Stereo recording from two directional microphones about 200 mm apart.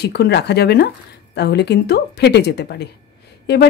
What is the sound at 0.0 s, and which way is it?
Speech, 55° left (ahead or behind).